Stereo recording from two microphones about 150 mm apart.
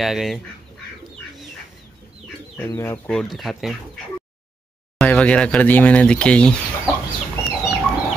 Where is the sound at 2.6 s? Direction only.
15° left (ahead or behind).